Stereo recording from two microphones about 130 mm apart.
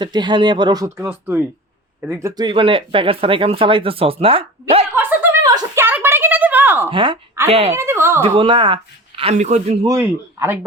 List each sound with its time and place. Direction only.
0.0 s speech: 35° right (ahead or behind)
0.9 s speech: 15° right (ahead or behind)
2.4 s speech: 40° right (ahead or behind)
4.9 s a sound: 15° right (ahead or behind)
6.9 s a woman's voice: 40° right (ahead or behind)
7.8 s speech: 20° right (ahead or behind)
8.2 s speech: 45° right (ahead or behind)
9.3 s speech: 60° right (ahead or behind)
9.8 s speech: 25° right (ahead or behind)